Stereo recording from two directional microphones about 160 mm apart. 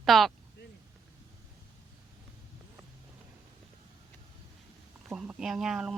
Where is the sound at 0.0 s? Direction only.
Centre (ahead or behind).